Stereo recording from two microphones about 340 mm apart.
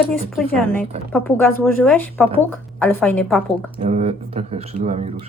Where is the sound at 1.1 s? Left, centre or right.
Centre.